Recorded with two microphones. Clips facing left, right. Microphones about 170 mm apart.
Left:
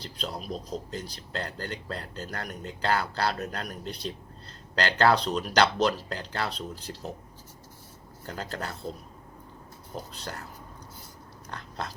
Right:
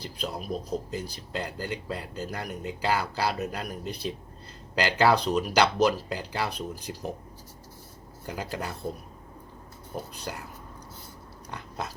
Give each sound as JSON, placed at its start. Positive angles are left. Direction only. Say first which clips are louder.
{"t": 0.0, "sound": "speech", "louder": "right 2 dB", "side_deg": -10}
{"t": 8.3, "sound": "speech", "louder": "right 2 dB", "side_deg": -10}
{"t": 11.5, "sound": "a sound", "louder": "right 1 dB", "side_deg": -10}